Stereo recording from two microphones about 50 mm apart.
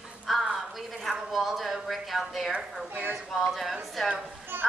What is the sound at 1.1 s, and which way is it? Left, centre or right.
A woman's voice, centre.